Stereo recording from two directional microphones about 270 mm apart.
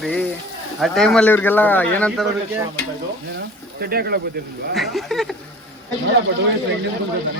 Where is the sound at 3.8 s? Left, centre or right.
Right.